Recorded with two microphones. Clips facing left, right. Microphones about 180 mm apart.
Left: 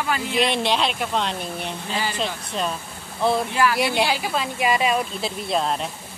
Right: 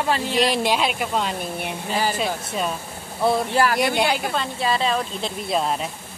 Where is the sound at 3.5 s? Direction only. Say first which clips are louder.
Right 2 dB; 35° right (ahead or behind).